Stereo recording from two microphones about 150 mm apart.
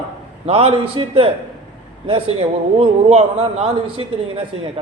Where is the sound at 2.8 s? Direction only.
45° right (ahead or behind).